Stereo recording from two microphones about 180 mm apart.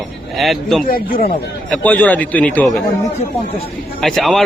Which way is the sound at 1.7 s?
10° left (ahead or behind).